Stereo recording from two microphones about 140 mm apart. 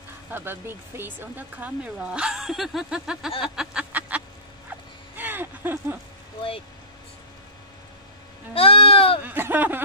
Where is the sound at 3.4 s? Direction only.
5° right (ahead or behind).